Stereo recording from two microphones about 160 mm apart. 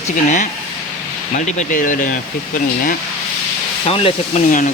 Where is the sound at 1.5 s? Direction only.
55° left (ahead or behind).